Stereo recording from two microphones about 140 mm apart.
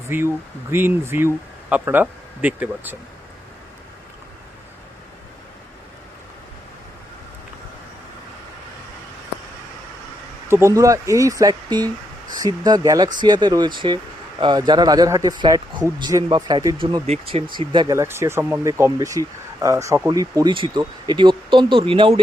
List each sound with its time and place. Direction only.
0.1 s speech: 15° right (ahead or behind)
10.5 s speech: 20° right (ahead or behind); by 17.9 s 35° right (ahead or behind)
17.9 s speech: 20° right (ahead or behind); by 22.2 s 40° right (ahead or behind)